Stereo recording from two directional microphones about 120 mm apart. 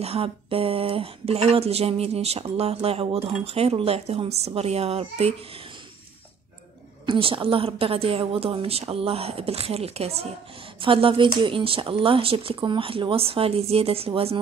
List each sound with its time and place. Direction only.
0.0 s speech: 55° right (ahead or behind)
7.1 s a woman's voice: 50° right (ahead or behind)
10.8 s a woman's voice: 50° right (ahead or behind)